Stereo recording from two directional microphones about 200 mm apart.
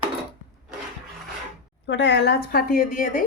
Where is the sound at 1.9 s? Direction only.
60° left (ahead or behind); by 3.2 s 45° left (ahead or behind).